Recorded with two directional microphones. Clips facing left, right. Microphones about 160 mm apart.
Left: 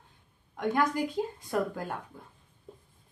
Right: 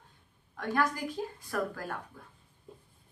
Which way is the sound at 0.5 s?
20° left (ahead or behind).